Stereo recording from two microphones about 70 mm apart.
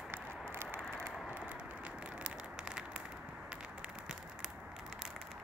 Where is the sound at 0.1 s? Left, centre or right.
Right.